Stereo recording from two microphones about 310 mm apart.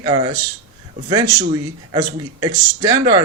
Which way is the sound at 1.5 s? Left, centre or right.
Centre.